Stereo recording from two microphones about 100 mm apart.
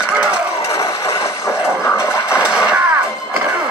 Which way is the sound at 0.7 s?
30° left (ahead or behind).